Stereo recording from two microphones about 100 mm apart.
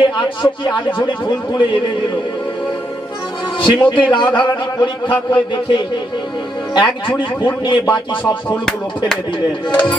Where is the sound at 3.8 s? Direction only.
55° left (ahead or behind).